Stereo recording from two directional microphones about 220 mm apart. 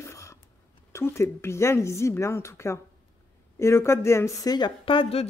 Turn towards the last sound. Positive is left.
turn(degrees=25)  # may be behind; listen again after turning